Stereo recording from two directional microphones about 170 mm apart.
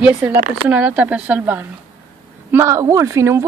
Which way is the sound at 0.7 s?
10° right (ahead or behind).